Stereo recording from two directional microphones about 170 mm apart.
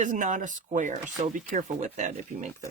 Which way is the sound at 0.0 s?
50° right (ahead or behind).